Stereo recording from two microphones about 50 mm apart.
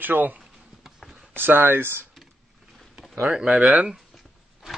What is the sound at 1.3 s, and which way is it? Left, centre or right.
Speech, right.